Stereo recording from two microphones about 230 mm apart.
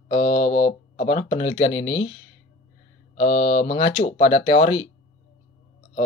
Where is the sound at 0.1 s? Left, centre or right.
Left.